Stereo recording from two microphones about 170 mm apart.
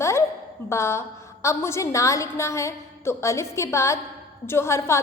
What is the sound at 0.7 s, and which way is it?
A woman's voice, 15° left (ahead or behind).